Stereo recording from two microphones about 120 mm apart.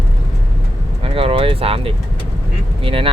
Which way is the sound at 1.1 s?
50° right (ahead or behind).